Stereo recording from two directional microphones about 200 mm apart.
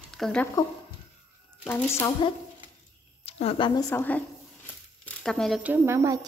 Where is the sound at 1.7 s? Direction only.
15° left (ahead or behind).